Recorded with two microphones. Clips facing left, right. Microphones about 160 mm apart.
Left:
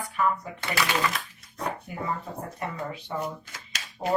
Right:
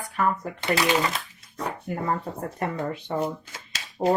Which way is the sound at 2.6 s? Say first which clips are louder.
Right 6 dB; 50° right (ahead or behind).